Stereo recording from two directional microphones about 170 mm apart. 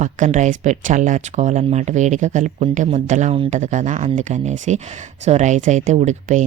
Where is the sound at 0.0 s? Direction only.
45° right (ahead or behind).